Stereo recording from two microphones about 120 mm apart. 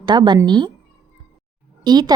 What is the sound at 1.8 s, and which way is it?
Speech, 35° right (ahead or behind).